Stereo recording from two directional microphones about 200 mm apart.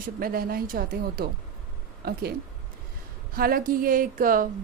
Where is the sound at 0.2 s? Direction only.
45° right (ahead or behind).